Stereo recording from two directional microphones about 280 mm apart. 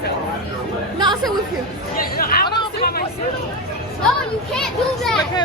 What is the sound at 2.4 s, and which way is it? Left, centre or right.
Chatter, centre.